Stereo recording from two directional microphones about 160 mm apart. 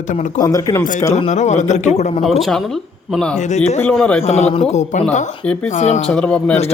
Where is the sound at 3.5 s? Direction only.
45° left (ahead or behind).